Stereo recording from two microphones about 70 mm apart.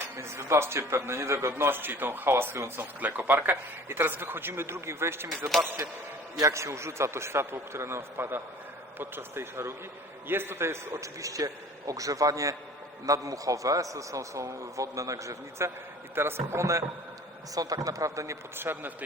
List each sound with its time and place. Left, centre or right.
0.2 s a man's voice: right
6.4 s a man's voice: right
17.5 s speech: right
18.5 s a man's voice: right